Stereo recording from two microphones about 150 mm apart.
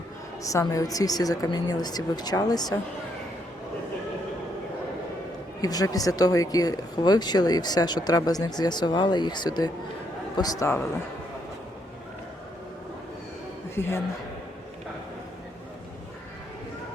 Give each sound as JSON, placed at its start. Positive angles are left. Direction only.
{"t": 0.4, "sound": "speech", "side_deg": 20}
{"t": 5.6, "sound": "speech", "side_deg": 25}
{"t": 13.7, "sound": "a man's voice", "side_deg": 15}